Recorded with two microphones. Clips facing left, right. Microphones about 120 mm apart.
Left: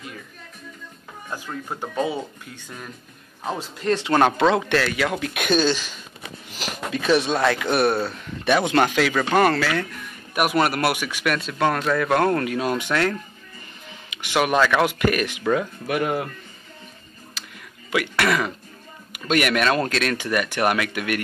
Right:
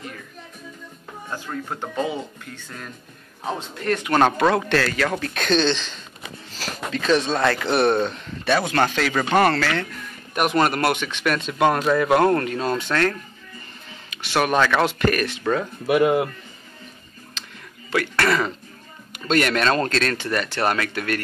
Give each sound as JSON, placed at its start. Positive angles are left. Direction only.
{"t": 1.5, "sound": "speech", "side_deg": 10}
{"t": 8.5, "sound": "speech", "side_deg": 15}
{"t": 11.5, "sound": "speech", "side_deg": -10}
{"t": 15.9, "sound": "speech", "side_deg": -20}
{"t": 17.4, "sound": "music", "side_deg": 5}
{"t": 17.9, "sound": "speech", "side_deg": 10}